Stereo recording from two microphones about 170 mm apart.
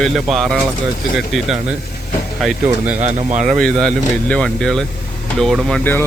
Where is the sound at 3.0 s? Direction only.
45° right (ahead or behind).